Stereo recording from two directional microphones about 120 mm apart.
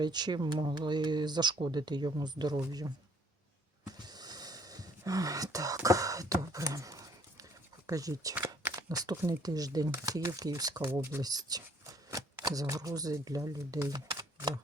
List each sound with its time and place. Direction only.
0.0 s speech: 35° right (ahead or behind)
3.8 s a sound: 35° right (ahead or behind)
7.9 s speech: 30° right (ahead or behind)
8.4 s crumpling: 15° right (ahead or behind)
8.9 s speech: 30° right (ahead or behind)
13.9 s typewriter: 30° right (ahead or behind)